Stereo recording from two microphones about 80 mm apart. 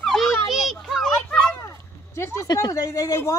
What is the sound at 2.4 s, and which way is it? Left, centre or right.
Speech, left.